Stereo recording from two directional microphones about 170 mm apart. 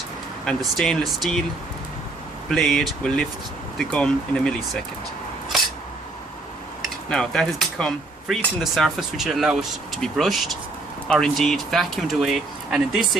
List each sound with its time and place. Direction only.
0.4 s speech: centre (ahead or behind)
2.5 s speech: centre (ahead or behind)
6.8 s speech: 5° left (ahead or behind)